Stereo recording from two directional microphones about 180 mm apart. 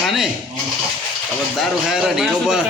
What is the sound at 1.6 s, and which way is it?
A man's voice, centre (ahead or behind).